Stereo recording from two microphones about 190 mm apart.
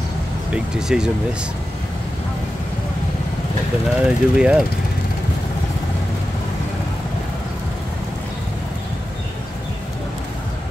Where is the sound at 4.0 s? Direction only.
5° right (ahead or behind).